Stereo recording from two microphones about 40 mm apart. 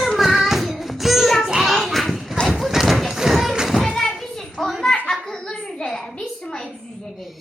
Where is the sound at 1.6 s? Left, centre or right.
Centre.